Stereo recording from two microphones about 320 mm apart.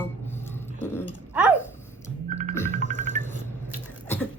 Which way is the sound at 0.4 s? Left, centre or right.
Centre.